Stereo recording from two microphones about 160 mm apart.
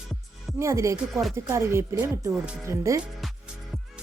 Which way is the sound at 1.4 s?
15° right (ahead or behind).